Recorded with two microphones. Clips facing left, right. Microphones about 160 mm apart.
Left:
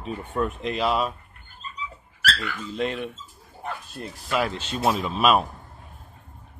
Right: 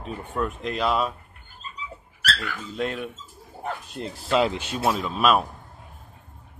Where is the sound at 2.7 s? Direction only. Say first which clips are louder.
Left 1 dB; centre (ahead or behind).